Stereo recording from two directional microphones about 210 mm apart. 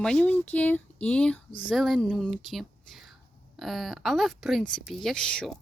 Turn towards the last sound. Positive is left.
turn(degrees=5)  # may be behind; listen again after turning